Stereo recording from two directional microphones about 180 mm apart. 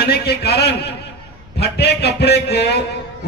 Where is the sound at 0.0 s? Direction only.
60° left (ahead or behind).